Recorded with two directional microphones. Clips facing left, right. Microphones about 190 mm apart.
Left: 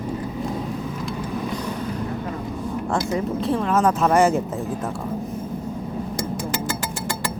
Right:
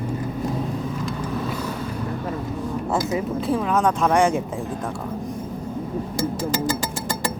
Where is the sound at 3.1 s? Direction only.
Centre (ahead or behind).